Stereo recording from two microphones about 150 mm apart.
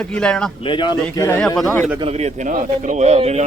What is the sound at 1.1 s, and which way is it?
Speech, 15° left (ahead or behind).